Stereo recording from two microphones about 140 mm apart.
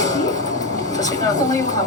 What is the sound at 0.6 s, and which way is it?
Vehicle, 25° left (ahead or behind).